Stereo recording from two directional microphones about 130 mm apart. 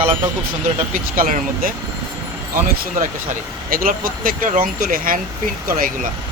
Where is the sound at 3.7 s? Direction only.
90° right.